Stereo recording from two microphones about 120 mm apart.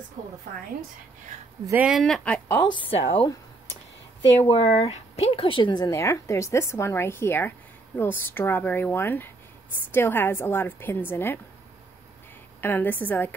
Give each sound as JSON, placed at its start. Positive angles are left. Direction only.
{"t": 1.8, "sound": "speech", "side_deg": 0}
{"t": 2.6, "sound": "a woman's voice", "side_deg": 45}
{"t": 4.4, "sound": "speech", "side_deg": 60}
{"t": 5.9, "sound": "a woman's voice", "side_deg": 25}
{"t": 12.5, "sound": "a woman's voice", "side_deg": 15}